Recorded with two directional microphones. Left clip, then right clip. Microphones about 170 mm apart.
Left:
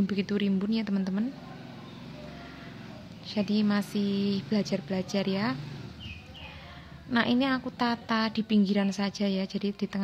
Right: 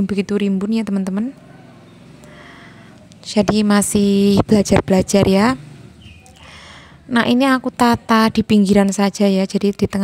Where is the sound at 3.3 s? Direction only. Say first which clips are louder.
Right 14 dB; 55° right (ahead or behind).